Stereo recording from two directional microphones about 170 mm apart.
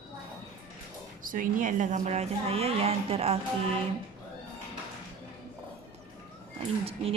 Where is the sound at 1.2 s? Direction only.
50° right (ahead or behind); by 3.3 s 35° right (ahead or behind).